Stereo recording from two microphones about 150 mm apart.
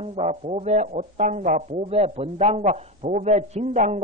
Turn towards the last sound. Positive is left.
turn(degrees=-50)  # may be behind; listen again after turning